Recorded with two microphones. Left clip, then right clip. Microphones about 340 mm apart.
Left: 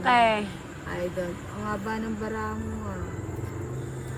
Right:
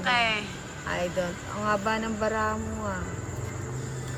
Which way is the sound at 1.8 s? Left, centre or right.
Right.